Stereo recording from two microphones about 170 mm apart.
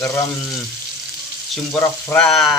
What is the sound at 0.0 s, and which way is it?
Frying, 15° left (ahead or behind).